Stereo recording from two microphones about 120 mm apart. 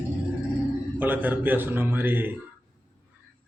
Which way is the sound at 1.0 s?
15° right (ahead or behind).